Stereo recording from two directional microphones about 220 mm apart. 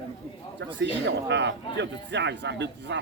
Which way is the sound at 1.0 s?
55° right (ahead or behind).